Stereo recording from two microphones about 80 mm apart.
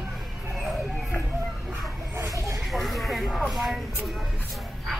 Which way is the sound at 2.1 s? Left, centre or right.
Right.